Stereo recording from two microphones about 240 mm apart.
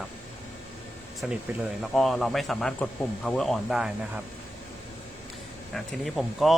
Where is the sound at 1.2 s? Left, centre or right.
Centre.